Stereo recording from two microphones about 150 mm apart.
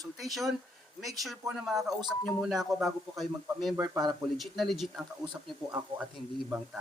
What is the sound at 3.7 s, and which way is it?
Speech, 25° right (ahead or behind).